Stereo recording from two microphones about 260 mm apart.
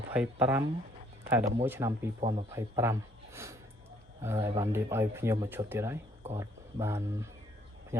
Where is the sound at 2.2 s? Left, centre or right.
Right.